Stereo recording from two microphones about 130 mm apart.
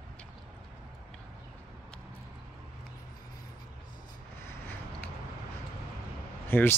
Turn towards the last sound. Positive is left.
turn(degrees=15)  # may be behind; listen again after turning